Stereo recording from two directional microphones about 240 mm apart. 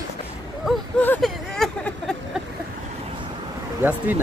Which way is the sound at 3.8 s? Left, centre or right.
Centre.